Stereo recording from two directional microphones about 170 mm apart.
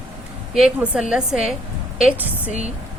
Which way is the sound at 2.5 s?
40° right (ahead or behind).